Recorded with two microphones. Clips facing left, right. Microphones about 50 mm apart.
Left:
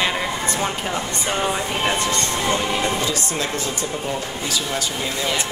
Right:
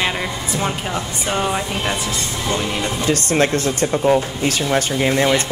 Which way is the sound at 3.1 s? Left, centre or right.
Right.